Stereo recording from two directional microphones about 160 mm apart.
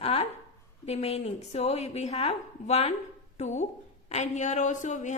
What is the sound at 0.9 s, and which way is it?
A woman's voice, 40° left (ahead or behind).